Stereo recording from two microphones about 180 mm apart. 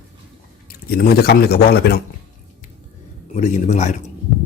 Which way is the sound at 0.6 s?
55° left (ahead or behind).